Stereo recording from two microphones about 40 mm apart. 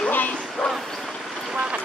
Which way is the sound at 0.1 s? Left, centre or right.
Left.